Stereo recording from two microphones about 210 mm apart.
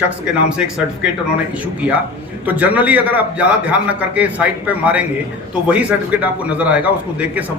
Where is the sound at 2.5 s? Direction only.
10° right (ahead or behind).